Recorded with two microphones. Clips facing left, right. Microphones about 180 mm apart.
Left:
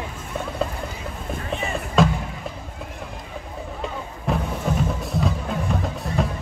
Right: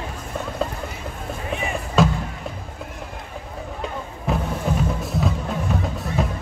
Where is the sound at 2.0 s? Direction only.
Centre (ahead or behind).